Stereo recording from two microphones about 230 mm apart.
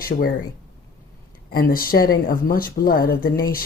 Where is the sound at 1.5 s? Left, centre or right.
Left.